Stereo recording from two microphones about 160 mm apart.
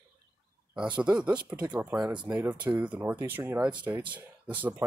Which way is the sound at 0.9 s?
5° right (ahead or behind).